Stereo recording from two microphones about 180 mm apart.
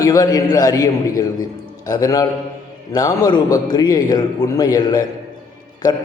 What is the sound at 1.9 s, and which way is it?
A man's voice, 20° left (ahead or behind).